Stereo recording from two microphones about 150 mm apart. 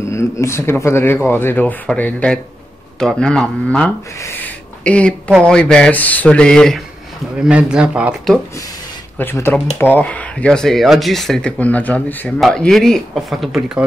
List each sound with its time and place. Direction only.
0.1 s speech: 20° left (ahead or behind)
4.2 s a sound: 10° left (ahead or behind)
5.4 s speech: 5° left (ahead or behind)
7.4 s speech: 10° right (ahead or behind)
9.2 s speech: 15° left (ahead or behind); by 13.8 s 5° right (ahead or behind)